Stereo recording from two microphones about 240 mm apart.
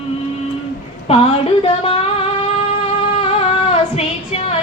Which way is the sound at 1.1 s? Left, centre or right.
Left.